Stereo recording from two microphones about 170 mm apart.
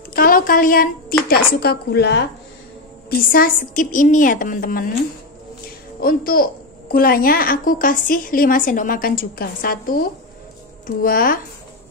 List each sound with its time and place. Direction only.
0.1 s a sound: 55° left (ahead or behind)
1.3 s a woman's voice: 70° left (ahead or behind)
3.1 s a woman's voice: 60° left (ahead or behind)
5.9 s a child's voice: 60° left (ahead or behind)